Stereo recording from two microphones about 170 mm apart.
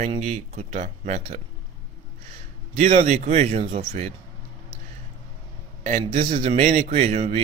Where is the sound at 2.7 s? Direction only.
40° right (ahead or behind).